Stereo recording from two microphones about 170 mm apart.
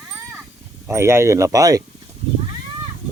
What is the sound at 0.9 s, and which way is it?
Speech, 15° right (ahead or behind).